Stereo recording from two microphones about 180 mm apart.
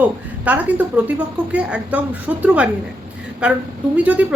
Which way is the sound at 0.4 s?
10° right (ahead or behind).